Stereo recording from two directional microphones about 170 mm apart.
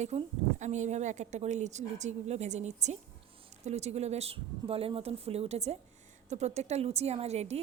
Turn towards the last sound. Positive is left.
turn(degrees=-40)  # may be behind; listen again after turning